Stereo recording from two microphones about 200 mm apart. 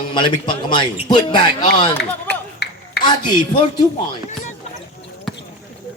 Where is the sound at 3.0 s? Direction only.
20° left (ahead or behind).